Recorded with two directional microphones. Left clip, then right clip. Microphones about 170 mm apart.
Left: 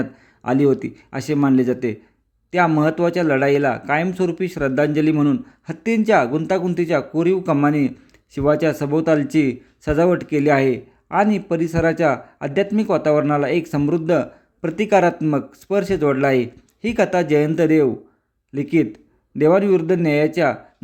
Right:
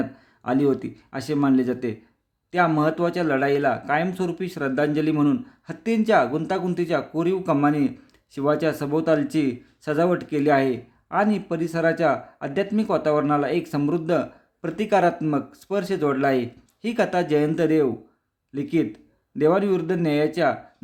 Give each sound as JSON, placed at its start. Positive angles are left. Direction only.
{"t": 0.0, "sound": "speech", "side_deg": 20}